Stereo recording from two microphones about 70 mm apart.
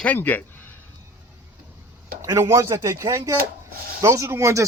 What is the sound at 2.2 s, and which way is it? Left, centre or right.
Speech, right.